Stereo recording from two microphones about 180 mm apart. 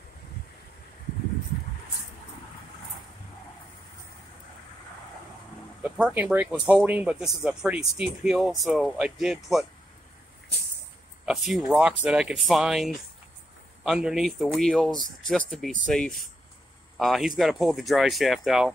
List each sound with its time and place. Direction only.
5.8 s speech: 5° right (ahead or behind)
11.2 s speech: 5° right (ahead or behind)